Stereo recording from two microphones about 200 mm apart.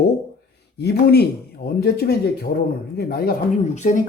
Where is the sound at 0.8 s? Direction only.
55° left (ahead or behind).